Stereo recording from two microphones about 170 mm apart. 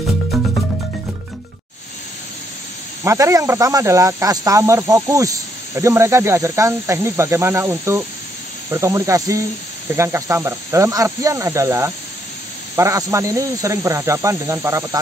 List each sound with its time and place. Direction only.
3.0 s speech: 15° right (ahead or behind)